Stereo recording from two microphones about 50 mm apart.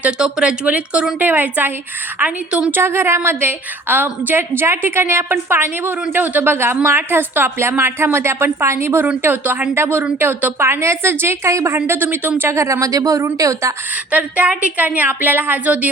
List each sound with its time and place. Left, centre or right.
0.2 s speech: centre
1.2 s a woman's voice: right
2.1 s a woman's voice: right
2.8 s a woman's voice: right
3.2 s a woman's voice: right
9.4 s a woman's voice: right
9.7 s a woman's voice: right
11.9 s a woman's voice: right
12.5 s a woman's voice: right
14.1 s a woman's voice: right
15.6 s speech: right